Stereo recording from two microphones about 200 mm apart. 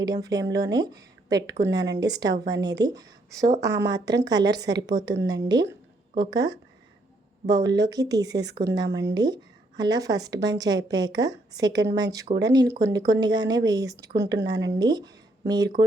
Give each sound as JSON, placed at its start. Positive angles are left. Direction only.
{"t": 0.0, "sound": "speech", "side_deg": -20}